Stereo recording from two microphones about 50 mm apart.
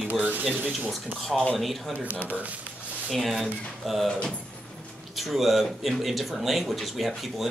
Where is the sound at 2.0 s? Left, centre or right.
Right.